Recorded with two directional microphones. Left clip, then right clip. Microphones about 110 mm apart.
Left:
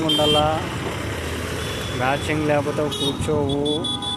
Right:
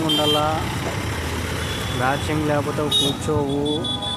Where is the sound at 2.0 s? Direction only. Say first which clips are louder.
Even; 5° right (ahead or behind).